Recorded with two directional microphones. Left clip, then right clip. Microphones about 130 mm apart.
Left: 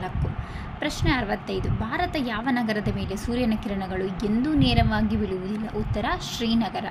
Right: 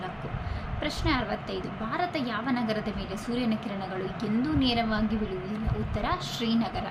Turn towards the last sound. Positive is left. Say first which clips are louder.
# left 3 dB
turn(degrees=50)  # may be behind; listen again after turning